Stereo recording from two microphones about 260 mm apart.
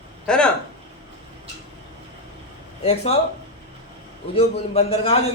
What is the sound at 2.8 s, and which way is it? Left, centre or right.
Speech, left.